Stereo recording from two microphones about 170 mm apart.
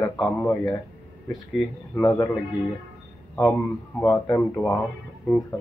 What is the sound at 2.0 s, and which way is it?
Speech, 20° left (ahead or behind).